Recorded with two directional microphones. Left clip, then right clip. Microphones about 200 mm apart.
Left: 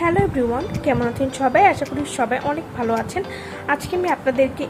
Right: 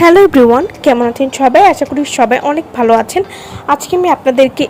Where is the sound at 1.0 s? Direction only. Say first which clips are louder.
Right 10 dB; 35° right (ahead or behind).